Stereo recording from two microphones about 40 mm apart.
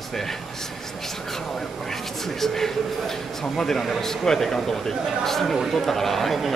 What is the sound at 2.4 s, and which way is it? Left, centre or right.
A man's voice, centre.